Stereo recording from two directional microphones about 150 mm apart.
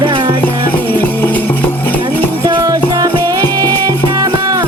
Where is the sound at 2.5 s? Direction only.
25° right (ahead or behind).